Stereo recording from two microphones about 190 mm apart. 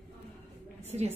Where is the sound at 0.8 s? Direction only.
35° right (ahead or behind).